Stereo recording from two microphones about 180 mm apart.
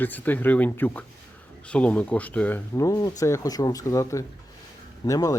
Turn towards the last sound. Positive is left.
turn(degrees=20)  # may be behind; listen again after turning